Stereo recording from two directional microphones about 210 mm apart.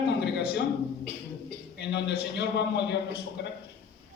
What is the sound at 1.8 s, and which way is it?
A man's voice, 55° left (ahead or behind).